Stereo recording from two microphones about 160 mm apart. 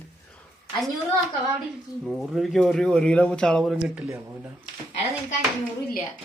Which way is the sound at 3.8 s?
10° right (ahead or behind).